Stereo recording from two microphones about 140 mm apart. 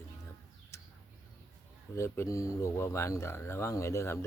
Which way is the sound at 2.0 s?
20° left (ahead or behind).